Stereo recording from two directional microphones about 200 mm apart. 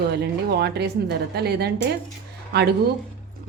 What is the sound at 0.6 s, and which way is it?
Speech, 55° right (ahead or behind).